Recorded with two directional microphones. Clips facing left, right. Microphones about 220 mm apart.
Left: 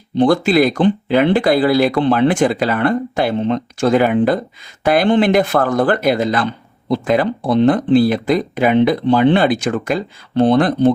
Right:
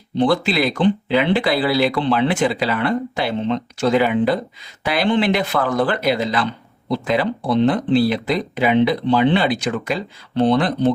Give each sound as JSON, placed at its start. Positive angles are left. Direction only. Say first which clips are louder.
{"t": 0.2, "sound": "speech", "louder": "left 5 dB", "side_deg": 50}